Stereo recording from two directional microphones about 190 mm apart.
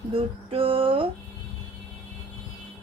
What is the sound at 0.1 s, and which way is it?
Music, 30° right (ahead or behind).